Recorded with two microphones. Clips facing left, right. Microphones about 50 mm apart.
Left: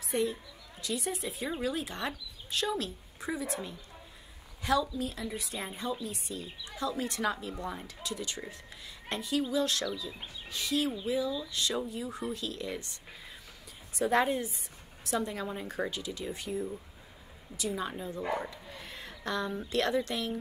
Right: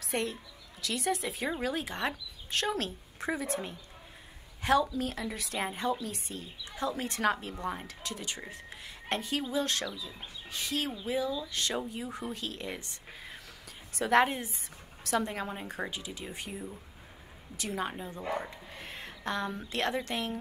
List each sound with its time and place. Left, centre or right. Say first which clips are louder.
0.0 s a woman's voice: left 2 dB; right
1.6 s speech: left 1 dB; right
5.3 s a woman's voice: even; right
5.6 s speech: right 5 dB; right
8.5 s a sound: right 1 dB; right
9.4 s speech: left 2 dB; right
13.9 s speech: right 2 dB; right
17.6 s speech: left 1 dB; right
17.9 s speech: left 3 dB; right
18.2 s speech: left 1 dB; centre
18.5 s a sound: right 1 dB; right
19.7 s speech: left 3 dB; right